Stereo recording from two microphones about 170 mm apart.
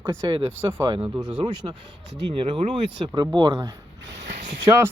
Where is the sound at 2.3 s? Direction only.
30° right (ahead or behind).